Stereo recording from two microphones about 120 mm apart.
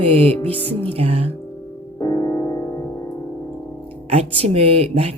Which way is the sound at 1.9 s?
30° left (ahead or behind).